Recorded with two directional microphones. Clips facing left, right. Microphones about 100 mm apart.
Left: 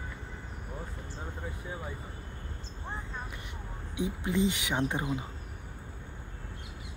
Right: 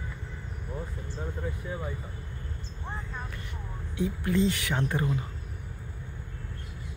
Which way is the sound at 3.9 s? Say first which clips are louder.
Right 3 dB; 15° left (ahead or behind).